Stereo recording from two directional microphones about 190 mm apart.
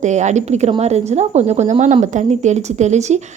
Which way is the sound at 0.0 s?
40° right (ahead or behind).